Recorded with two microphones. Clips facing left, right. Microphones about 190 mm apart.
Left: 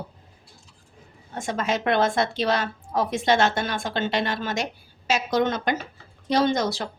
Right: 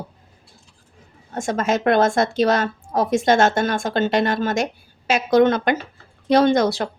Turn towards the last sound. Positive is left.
turn(degrees=-60)  # may be behind; listen again after turning